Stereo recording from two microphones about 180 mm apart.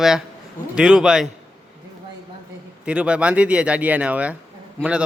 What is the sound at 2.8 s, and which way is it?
Speech, 5° right (ahead or behind).